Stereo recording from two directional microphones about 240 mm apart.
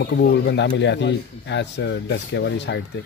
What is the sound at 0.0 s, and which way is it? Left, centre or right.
Speech, left.